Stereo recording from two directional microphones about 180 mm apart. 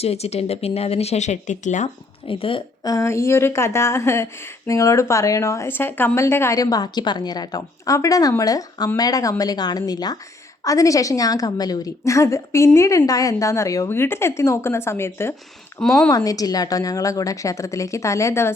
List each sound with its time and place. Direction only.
0.0 s speech: 35° left (ahead or behind)
2.2 s a woman's voice: 30° left (ahead or behind); by 15.4 s 15° left (ahead or behind)
15.8 s speech: centre (ahead or behind)
16.0 s a woman's voice: 20° left (ahead or behind)